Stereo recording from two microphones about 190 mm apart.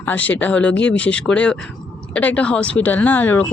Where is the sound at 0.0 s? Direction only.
10° left (ahead or behind).